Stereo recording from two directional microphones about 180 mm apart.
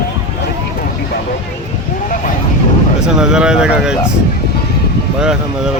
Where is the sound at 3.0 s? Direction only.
5° right (ahead or behind).